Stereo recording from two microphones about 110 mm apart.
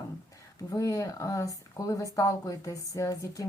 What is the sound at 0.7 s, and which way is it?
Speech, 30° left (ahead or behind).